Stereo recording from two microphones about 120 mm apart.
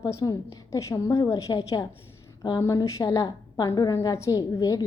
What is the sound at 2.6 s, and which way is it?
A woman's voice, 30° left (ahead or behind).